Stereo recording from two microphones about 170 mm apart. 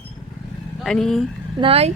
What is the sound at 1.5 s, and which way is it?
Speech, 35° right (ahead or behind).